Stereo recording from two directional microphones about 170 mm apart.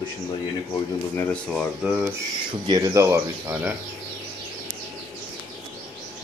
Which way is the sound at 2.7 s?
20° right (ahead or behind).